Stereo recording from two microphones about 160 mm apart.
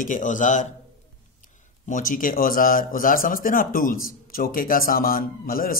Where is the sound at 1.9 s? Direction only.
55° left (ahead or behind).